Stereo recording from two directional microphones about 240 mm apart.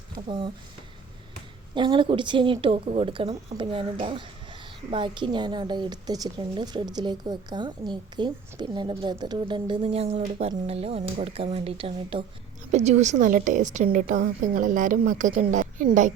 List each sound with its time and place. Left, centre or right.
0.3 s a woman's voice: right
1.7 s a woman's voice: centre
4.9 s a woman's voice: centre